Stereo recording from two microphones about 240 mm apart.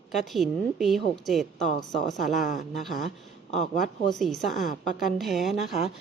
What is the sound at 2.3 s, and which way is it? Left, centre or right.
Speech, left.